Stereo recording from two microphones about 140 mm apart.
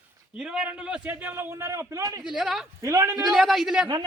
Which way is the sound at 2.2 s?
5° right (ahead or behind).